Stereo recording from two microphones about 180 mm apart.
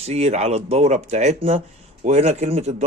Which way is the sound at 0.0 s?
35° right (ahead or behind).